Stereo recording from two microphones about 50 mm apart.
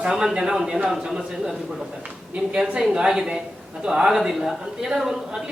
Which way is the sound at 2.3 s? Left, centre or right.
Right.